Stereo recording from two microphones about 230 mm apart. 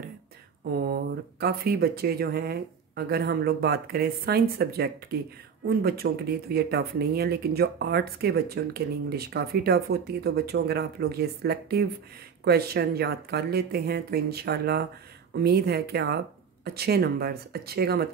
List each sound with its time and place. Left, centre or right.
0.7 s speech: right